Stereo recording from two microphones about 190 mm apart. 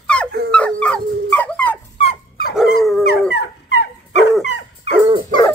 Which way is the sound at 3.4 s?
60° left (ahead or behind).